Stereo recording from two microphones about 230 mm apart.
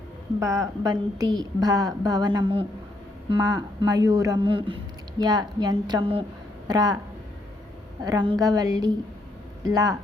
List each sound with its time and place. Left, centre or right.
0.3 s a woman's voice: centre
8.0 s a woman's voice: centre